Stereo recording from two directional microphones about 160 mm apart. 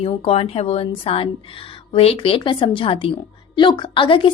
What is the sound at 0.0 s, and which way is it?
Speech, 35° left (ahead or behind).